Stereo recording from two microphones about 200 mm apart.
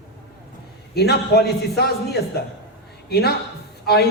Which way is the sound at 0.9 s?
55° left (ahead or behind).